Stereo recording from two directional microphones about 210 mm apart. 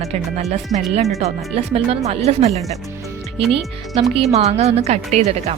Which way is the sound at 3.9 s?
30° right (ahead or behind).